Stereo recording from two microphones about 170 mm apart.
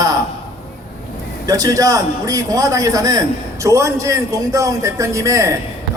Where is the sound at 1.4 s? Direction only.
20° right (ahead or behind).